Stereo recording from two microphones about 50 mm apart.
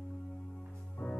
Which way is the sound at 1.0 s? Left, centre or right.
Left.